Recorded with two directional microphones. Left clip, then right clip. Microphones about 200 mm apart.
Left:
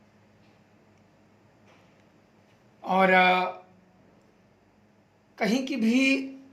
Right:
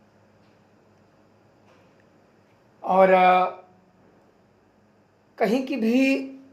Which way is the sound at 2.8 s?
40° left (ahead or behind).